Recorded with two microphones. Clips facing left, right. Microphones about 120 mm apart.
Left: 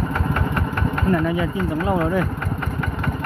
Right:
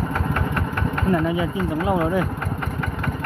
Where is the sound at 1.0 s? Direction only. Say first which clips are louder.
Even; 20° right (ahead or behind).